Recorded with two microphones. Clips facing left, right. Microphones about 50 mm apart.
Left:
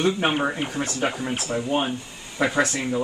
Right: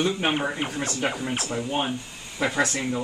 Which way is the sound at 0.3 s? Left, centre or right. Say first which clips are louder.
Left 2 dB; centre.